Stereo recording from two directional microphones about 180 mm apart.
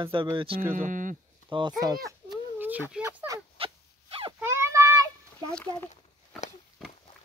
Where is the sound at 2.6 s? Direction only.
10° right (ahead or behind).